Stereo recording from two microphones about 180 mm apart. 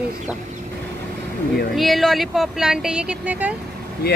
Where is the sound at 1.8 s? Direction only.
Centre (ahead or behind).